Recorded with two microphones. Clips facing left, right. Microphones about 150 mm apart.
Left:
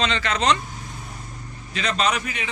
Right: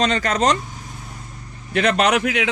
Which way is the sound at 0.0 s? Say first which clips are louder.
Right 4 dB; 45° right (ahead or behind).